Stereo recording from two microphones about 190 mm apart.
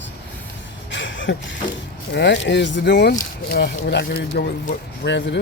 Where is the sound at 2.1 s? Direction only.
65° left (ahead or behind).